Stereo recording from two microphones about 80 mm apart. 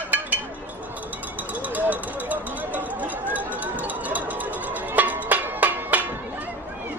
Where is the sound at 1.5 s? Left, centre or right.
Centre.